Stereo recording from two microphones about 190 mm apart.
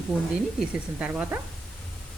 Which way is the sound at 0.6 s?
5° right (ahead or behind).